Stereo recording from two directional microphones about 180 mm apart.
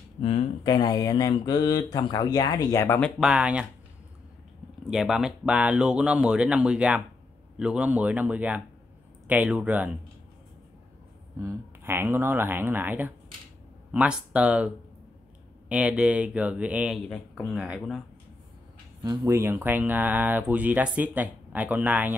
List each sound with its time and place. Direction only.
0.7 s speech: 20° left (ahead or behind)
3.2 s speech: 5° right (ahead or behind)
4.8 s speech: centre (ahead or behind)
11.3 s speech: 15° right (ahead or behind)
15.7 s speech: 5° right (ahead or behind)
17.1 s speech: 5° left (ahead or behind)
19.0 s speech: 15° right (ahead or behind)